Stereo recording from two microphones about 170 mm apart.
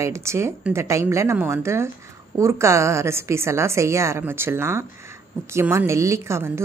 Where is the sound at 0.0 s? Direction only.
15° right (ahead or behind).